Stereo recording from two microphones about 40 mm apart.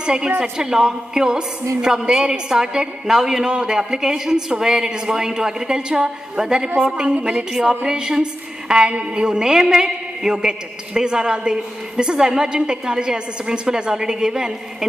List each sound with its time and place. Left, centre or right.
0.0 s a woman's voice: right